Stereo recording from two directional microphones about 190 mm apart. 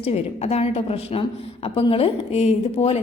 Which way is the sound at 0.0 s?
35° left (ahead or behind).